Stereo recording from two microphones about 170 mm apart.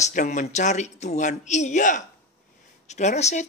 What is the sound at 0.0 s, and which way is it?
Speech, 45° left (ahead or behind).